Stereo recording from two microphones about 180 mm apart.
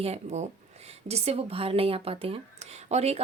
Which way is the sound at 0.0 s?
35° right (ahead or behind).